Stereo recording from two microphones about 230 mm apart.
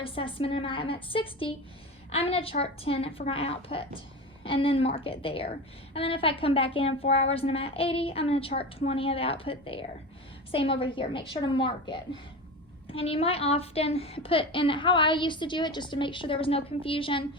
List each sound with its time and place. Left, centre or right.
0.0 s a woman's voice: left